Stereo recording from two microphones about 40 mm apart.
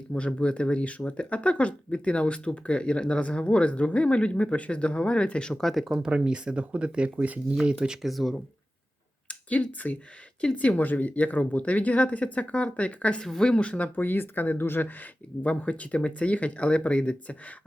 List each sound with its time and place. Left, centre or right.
0.3 s speech: left
5.5 s speech: centre
6.0 s speech: right
8.0 s speech: centre
9.5 s speech: left
14.6 s speech: left
15.4 s speech: left